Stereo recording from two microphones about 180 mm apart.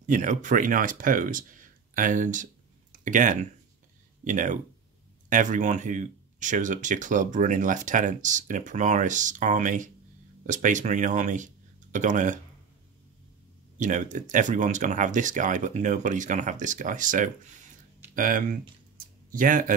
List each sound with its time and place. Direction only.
0.0 s speech: 45° right (ahead or behind)
13.7 s speech: 45° right (ahead or behind)
18.1 s a sound: 50° right (ahead or behind)